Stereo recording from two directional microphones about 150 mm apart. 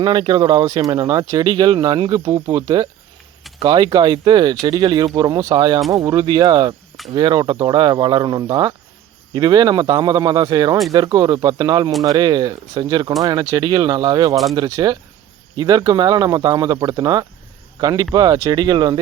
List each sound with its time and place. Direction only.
0.0 s speech: 30° right (ahead or behind)